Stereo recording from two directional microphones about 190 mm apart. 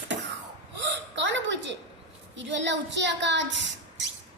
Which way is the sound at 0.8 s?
70° right (ahead or behind).